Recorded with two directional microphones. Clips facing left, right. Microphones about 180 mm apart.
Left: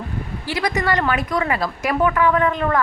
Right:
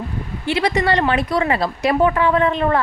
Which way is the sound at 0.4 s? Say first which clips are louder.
Right 4 dB; 25° right (ahead or behind).